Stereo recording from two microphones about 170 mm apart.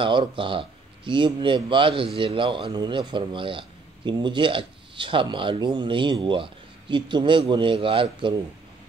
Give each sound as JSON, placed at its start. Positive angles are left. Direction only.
{"t": 0.0, "sound": "a man's voice", "side_deg": -30}